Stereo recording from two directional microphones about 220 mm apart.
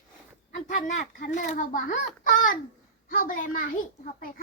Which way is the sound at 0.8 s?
35° left (ahead or behind).